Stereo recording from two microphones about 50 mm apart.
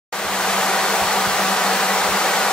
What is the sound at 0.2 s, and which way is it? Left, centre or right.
Hair dryer, centre.